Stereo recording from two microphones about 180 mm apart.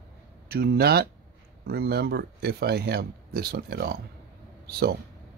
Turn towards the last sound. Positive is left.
turn(degrees=-60)  # may be behind; listen again after turning